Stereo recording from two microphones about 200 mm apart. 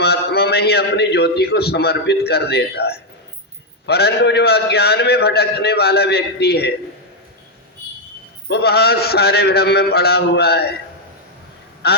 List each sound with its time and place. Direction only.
0.0 s a man's voice: 55° left (ahead or behind)
8.4 s a man's voice: 55° left (ahead or behind)
11.8 s a man's voice: 55° left (ahead or behind)